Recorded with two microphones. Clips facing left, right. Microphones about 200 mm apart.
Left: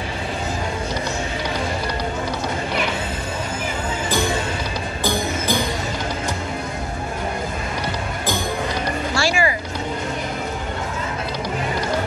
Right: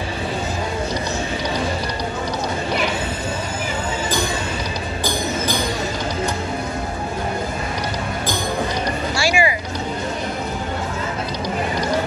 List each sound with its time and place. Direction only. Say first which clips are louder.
9.2 s vehicle: right 2 dB; 15° right (ahead or behind)